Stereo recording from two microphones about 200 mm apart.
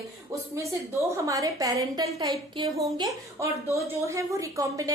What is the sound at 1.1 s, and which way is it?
A woman's voice, 15° right (ahead or behind).